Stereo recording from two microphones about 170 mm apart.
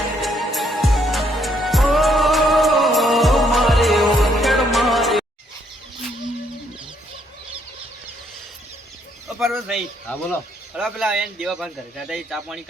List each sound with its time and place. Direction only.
0.2 s music: centre (ahead or behind)
9.4 s bird: centre (ahead or behind)
10.1 s a man's voice: 10° left (ahead or behind)